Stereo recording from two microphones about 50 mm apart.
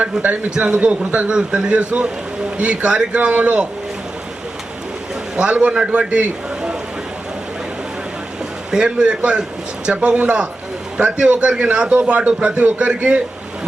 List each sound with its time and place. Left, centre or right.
0.0 s a man's voice: right
5.4 s a man's voice: right
8.7 s a man's voice: centre